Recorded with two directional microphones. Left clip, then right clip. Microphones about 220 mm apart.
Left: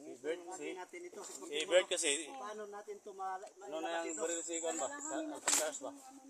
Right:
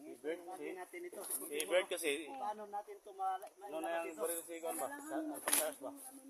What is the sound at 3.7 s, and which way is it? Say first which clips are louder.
Speech: left 1 dB; 45° left (ahead or behind).